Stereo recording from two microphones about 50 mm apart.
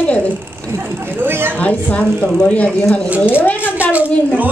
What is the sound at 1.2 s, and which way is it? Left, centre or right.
Speech, right.